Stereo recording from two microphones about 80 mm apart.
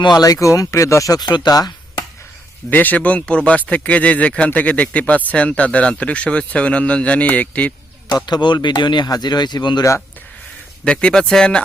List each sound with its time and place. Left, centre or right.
0.2 s speech: left
1.2 s speech: left
2.6 s speech: left
8.1 s speech: left
9.0 s speech: left
10.8 s speech: centre